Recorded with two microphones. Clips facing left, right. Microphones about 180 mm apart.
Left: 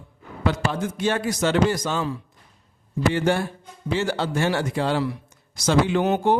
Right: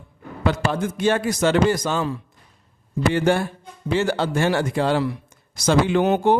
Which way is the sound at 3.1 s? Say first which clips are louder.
Right 3 dB; 55° right (ahead or behind).